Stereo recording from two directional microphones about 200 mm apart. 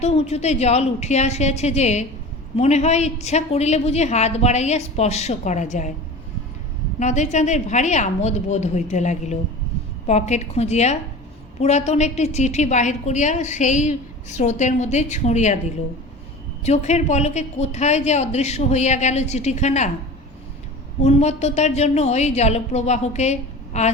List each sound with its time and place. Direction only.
0.0 s a woman's voice: 30° left (ahead or behind)
7.0 s a woman's voice: 35° left (ahead or behind)
16.6 s a woman's voice: 35° left (ahead or behind)
21.0 s a woman's voice: 35° left (ahead or behind)